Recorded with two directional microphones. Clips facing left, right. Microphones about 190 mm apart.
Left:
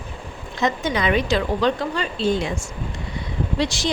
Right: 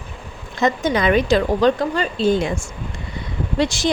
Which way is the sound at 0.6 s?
50° right (ahead or behind).